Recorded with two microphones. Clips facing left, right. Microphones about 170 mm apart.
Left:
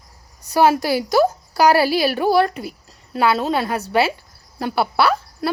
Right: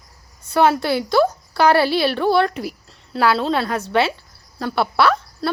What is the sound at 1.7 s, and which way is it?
A woman's voice, 10° left (ahead or behind).